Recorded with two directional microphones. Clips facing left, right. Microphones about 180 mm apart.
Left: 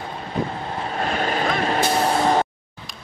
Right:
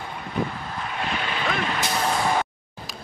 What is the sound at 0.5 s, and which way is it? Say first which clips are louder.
Vehicle: left 4 dB; 35° left (ahead or behind).